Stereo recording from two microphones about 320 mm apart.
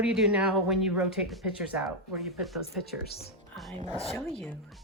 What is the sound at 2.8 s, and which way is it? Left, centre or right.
Speech, centre.